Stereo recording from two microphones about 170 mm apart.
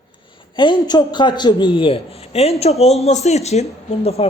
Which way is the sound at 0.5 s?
25° left (ahead or behind).